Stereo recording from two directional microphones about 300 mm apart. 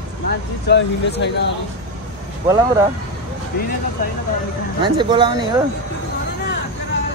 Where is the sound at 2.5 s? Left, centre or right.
Centre.